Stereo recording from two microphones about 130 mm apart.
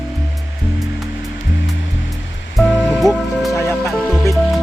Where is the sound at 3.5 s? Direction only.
20° left (ahead or behind).